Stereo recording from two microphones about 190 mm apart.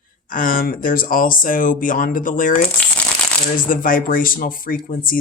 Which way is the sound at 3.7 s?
45° left (ahead or behind).